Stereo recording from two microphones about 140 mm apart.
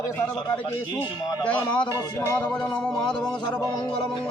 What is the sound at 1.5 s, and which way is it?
Speech, 10° left (ahead or behind).